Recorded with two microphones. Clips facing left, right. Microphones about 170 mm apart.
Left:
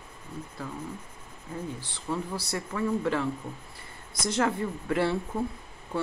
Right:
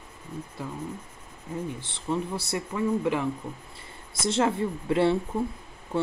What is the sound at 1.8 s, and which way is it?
Speech, 20° right (ahead or behind).